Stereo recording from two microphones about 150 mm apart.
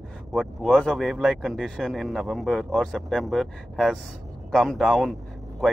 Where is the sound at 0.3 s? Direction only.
Centre (ahead or behind).